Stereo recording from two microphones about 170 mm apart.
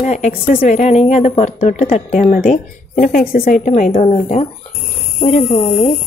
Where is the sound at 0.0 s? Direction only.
45° left (ahead or behind).